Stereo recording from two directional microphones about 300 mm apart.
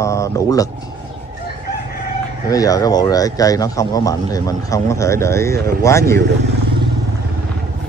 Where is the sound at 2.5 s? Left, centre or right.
Centre.